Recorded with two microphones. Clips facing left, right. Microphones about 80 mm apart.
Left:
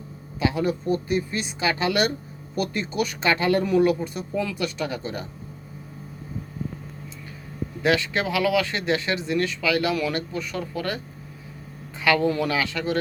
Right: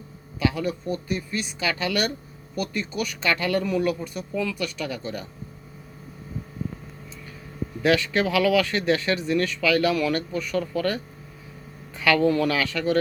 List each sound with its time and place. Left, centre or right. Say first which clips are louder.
0.3 s speech: left 1 dB; left
7.8 s speech: right 1 dB; left
12.0 s speech: right 1 dB; left